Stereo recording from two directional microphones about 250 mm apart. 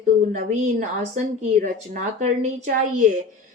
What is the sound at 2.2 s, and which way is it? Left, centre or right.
Speech, right.